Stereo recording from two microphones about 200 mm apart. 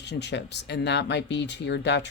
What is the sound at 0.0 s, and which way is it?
Speech, 60° left (ahead or behind).